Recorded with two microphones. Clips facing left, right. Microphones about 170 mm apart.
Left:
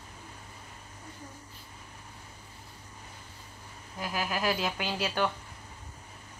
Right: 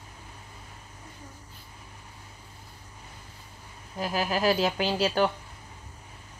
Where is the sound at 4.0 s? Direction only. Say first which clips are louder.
Right 5 dB; 30° right (ahead or behind).